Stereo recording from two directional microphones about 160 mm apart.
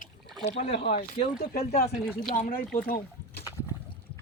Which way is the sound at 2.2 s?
60° left (ahead or behind).